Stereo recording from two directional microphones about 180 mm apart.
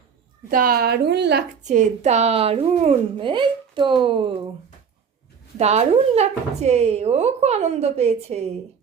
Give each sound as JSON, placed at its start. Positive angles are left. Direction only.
{"t": 0.5, "sound": "a woman's voice", "side_deg": -55}
{"t": 1.6, "sound": "speech", "side_deg": -40}
{"t": 5.5, "sound": "speech", "side_deg": -40}